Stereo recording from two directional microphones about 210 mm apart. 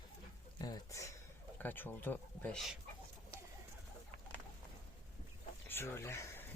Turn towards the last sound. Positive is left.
turn(degrees=10)  # may be behind; listen again after turning